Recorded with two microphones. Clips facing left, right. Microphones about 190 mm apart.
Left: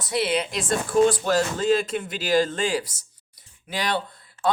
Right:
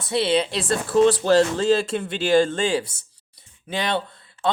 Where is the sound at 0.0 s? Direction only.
30° right (ahead or behind).